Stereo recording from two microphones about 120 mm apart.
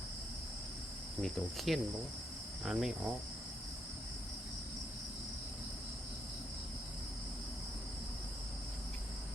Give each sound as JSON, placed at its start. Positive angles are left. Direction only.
{"t": 1.2, "sound": "cricket", "side_deg": 0}